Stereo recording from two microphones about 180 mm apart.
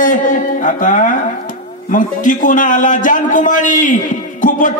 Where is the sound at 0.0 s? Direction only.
45° left (ahead or behind).